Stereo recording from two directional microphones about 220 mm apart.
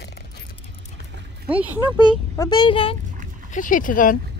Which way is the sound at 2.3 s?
20° left (ahead or behind).